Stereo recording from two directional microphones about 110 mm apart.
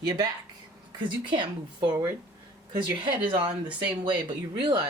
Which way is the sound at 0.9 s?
45° right (ahead or behind).